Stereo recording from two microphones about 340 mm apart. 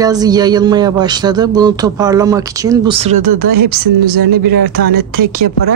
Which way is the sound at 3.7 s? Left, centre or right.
Right.